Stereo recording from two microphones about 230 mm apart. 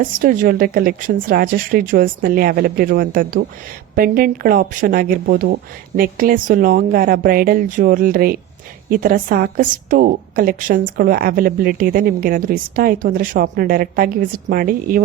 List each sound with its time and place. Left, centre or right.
0.2 s a woman's voice: right